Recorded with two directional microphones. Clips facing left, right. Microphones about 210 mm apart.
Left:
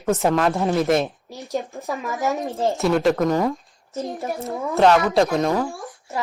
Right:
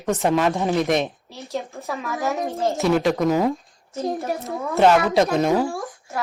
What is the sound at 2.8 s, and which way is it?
A woman's voice, centre (ahead or behind).